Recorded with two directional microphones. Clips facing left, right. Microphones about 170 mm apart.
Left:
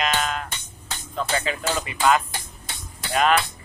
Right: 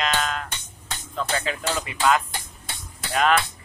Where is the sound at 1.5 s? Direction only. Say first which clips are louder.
Left 1 dB; 5° left (ahead or behind).